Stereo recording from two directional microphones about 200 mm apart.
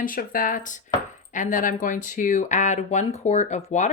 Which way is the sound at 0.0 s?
45° left (ahead or behind).